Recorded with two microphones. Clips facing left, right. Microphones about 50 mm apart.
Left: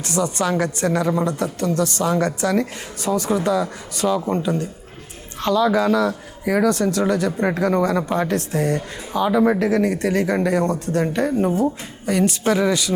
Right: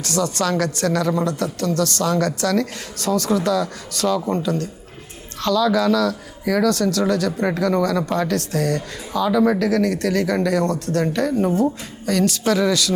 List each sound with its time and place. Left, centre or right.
0.0 s a woman's voice: centre